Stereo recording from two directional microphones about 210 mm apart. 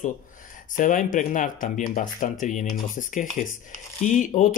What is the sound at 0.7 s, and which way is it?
Speech, 40° left (ahead or behind).